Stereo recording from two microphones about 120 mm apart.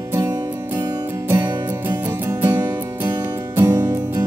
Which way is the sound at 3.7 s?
30° right (ahead or behind).